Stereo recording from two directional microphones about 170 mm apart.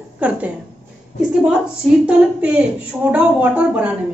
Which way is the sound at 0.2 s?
10° right (ahead or behind).